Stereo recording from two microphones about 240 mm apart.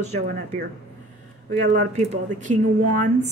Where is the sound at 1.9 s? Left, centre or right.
Right.